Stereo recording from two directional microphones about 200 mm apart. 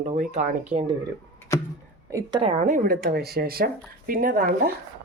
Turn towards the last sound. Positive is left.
turn(degrees=-45)  # may be behind; listen again after turning